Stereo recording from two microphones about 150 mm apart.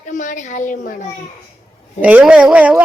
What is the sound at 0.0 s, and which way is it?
A woman's voice, 55° left (ahead or behind).